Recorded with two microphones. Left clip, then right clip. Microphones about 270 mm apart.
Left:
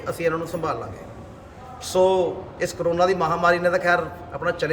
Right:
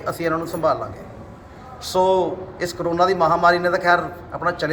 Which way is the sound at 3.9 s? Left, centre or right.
Centre.